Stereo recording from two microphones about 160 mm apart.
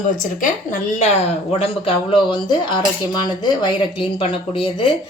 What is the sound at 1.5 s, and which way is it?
Speech, 35° left (ahead or behind).